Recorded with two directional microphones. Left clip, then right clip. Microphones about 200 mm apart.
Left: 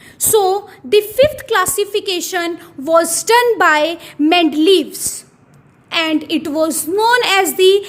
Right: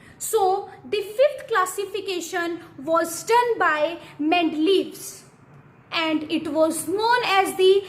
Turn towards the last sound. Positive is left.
turn(degrees=45)  # may be behind; listen again after turning